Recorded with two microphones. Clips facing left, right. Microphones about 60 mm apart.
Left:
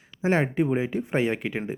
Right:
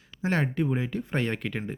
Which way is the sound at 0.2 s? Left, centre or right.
Centre.